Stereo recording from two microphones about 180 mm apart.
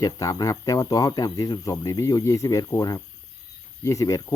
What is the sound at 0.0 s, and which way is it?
Speech, 20° left (ahead or behind).